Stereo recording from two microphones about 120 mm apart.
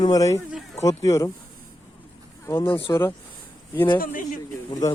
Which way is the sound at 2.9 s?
20° left (ahead or behind).